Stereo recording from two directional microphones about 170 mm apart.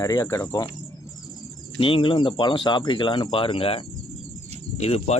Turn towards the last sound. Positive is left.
turn(degrees=40)  # may be behind; listen again after turning